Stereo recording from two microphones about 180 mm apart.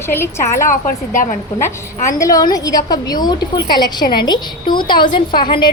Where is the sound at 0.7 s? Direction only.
50° left (ahead or behind).